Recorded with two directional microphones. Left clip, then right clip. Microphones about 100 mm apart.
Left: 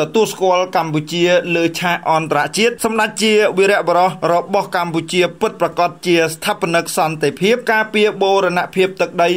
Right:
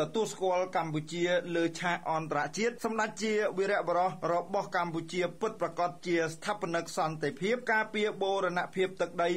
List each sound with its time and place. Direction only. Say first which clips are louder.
0.0 s speech: left 16 dB; 25° left (ahead or behind)